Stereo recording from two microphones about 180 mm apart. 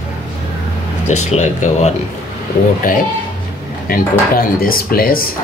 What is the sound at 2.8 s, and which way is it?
Speech, 50° left (ahead or behind).